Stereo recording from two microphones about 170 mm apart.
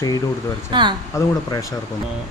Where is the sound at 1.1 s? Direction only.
20° left (ahead or behind).